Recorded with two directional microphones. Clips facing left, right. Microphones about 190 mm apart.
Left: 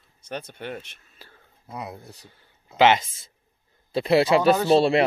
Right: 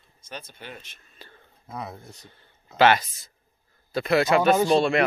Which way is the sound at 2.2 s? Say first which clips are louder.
Even; 10° left (ahead or behind).